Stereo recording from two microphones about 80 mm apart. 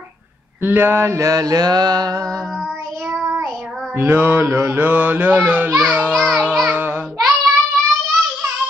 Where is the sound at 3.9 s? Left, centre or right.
Right.